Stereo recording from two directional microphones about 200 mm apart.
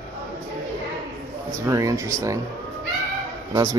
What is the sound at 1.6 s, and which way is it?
Speech, 15° right (ahead or behind).